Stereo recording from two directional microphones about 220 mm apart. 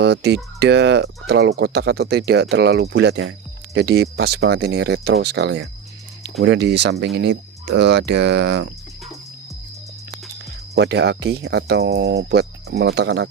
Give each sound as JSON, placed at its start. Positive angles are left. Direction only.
{"t": 0.0, "sound": "speech", "side_deg": -50}
{"t": 10.8, "sound": "speech", "side_deg": -50}